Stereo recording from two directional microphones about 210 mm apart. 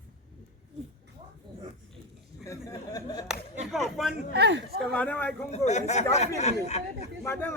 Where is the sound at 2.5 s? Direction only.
15° left (ahead or behind).